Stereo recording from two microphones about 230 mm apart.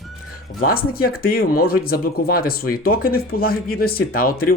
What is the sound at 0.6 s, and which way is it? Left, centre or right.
Speech, left.